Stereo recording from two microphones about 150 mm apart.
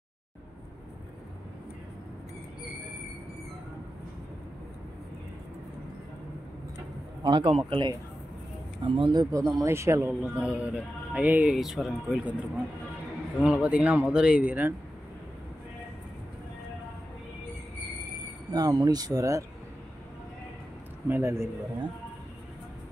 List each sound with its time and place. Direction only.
7.2 s speech: 30° right (ahead or behind); by 14.7 s 10° right (ahead or behind)
18.5 s speech: 25° right (ahead or behind)
21.1 s speech: 15° right (ahead or behind)